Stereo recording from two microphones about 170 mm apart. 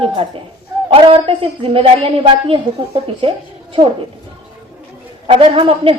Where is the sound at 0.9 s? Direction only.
30° right (ahead or behind).